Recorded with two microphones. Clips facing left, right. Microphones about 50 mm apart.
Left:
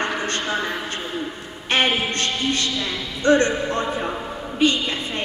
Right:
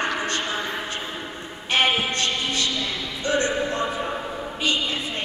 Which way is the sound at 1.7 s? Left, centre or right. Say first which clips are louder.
Left 1 dB; left.